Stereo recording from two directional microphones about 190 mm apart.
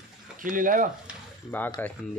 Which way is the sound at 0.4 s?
45° right (ahead or behind).